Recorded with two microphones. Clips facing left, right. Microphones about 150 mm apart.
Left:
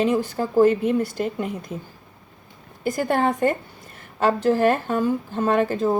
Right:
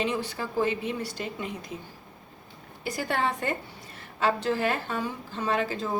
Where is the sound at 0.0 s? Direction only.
45° left (ahead or behind).